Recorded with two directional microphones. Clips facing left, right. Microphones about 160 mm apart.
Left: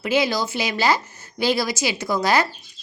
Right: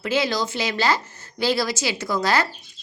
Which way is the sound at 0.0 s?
10° left (ahead or behind).